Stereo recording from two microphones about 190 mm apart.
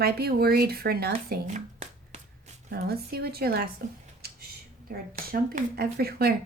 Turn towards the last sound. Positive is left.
turn(degrees=-55)  # may be behind; listen again after turning